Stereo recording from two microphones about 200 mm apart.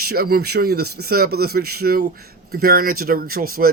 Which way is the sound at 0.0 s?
50° right (ahead or behind).